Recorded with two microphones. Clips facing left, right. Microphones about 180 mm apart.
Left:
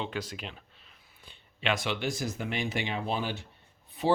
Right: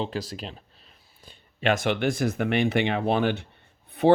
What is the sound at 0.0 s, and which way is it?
Speech, 35° right (ahead or behind).